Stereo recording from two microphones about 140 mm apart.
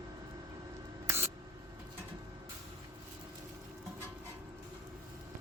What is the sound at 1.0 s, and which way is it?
Spray, 20° right (ahead or behind).